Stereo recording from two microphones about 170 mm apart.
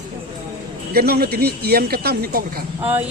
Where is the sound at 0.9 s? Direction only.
65° right (ahead or behind).